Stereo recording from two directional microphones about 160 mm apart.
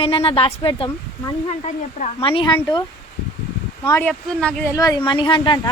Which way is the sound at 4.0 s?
5° left (ahead or behind).